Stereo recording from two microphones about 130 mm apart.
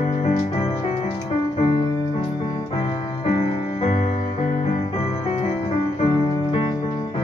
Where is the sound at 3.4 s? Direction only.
60° left (ahead or behind).